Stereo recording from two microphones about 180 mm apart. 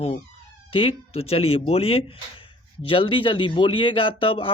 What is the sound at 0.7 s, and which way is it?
Speech, 30° left (ahead or behind).